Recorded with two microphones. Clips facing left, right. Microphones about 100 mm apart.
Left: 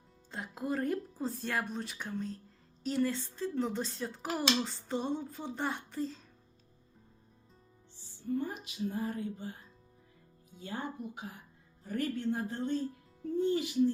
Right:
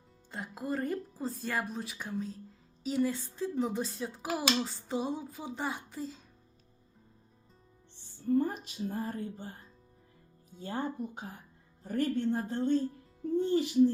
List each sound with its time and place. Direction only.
0.3 s speech: centre (ahead or behind)
8.0 s music: 40° right (ahead or behind)
10.6 s music: 35° right (ahead or behind)